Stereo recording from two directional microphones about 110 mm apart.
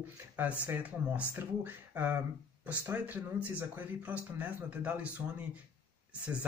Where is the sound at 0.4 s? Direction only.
15° right (ahead or behind).